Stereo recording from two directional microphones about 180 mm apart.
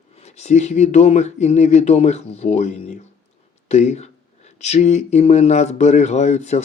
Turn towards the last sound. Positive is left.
turn(degrees=40)  # may be behind; listen again after turning